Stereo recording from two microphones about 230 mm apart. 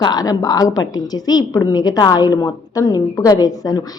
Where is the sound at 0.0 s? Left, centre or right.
Centre.